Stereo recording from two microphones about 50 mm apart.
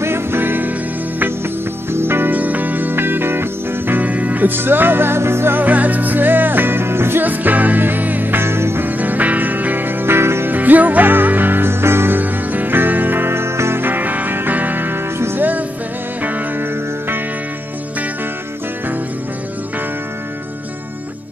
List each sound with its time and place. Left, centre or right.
0.0 s music: right
1.9 s music: right
5.6 s music: right
7.2 s music: right
8.8 s music: right
10.5 s music: right
12.2 s music: right
13.8 s music: right
15.1 s music: right
16.2 s music: right